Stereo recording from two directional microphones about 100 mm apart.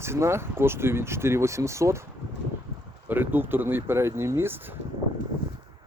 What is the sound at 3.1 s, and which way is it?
Speech, 20° right (ahead or behind).